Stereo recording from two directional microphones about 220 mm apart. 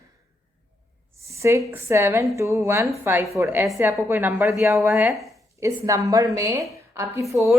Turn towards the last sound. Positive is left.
turn(degrees=-15)  # may be behind; listen again after turning